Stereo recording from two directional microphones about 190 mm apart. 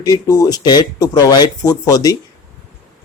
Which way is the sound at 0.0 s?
20° left (ahead or behind).